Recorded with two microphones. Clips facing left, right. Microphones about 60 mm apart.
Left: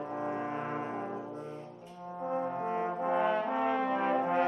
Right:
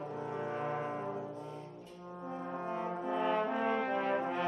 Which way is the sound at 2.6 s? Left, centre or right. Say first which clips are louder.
Left 5 dB; left.